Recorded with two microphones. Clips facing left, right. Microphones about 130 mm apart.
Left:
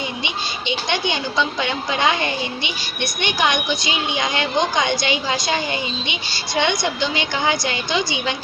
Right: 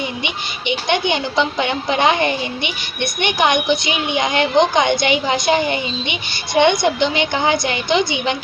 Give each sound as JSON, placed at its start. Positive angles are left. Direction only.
{"t": 0.3, "sound": "a child's voice", "side_deg": -20}